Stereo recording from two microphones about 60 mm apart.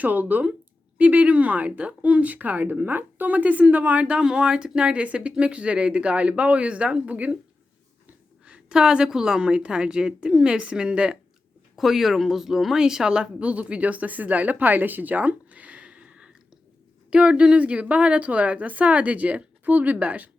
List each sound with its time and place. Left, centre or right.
0.0 s a woman's voice: right
8.4 s a woman's voice: centre
11.8 s a woman's voice: centre; by 20.3 s right